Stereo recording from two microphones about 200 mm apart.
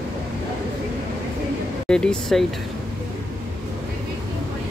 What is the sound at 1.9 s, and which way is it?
Speech, 5° left (ahead or behind).